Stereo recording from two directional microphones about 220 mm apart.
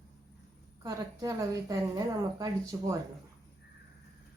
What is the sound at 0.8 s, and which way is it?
A woman's voice, 15° right (ahead or behind).